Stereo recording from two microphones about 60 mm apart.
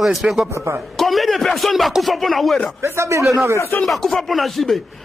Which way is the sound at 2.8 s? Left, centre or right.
Right.